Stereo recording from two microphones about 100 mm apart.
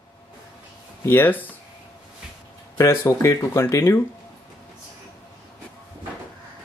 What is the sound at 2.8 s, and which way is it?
Speech, 30° left (ahead or behind).